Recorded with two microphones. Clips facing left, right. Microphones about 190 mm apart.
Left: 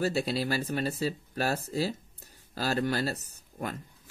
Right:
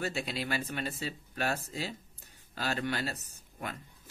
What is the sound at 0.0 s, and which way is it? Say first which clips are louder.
Speech: left 6 dB; 35° left (ahead or behind).